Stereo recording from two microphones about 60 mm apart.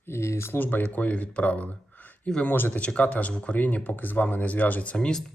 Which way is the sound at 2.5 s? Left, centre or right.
Left.